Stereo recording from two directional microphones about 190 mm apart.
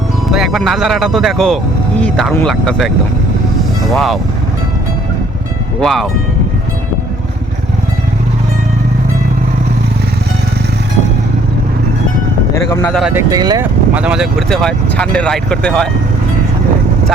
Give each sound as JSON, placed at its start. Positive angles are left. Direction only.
{"t": 0.3, "sound": "speech", "side_deg": 0}
{"t": 3.6, "sound": "music", "side_deg": 0}
{"t": 5.8, "sound": "speech", "side_deg": 0}
{"t": 12.7, "sound": "speech", "side_deg": 10}
{"t": 13.0, "sound": "speech", "side_deg": -5}
{"t": 13.3, "sound": "speech", "side_deg": -20}
{"t": 13.9, "sound": "speech", "side_deg": -5}